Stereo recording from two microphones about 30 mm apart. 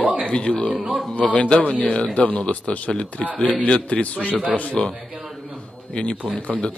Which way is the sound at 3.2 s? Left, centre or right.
Left.